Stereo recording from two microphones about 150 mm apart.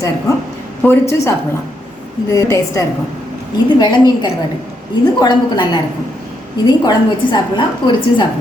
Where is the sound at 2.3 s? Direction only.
20° left (ahead or behind).